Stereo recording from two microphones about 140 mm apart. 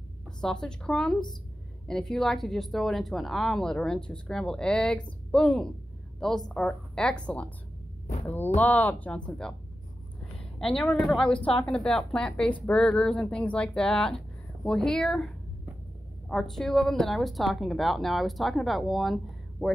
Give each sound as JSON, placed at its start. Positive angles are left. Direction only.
{"t": 0.4, "sound": "a woman's voice", "side_deg": 5}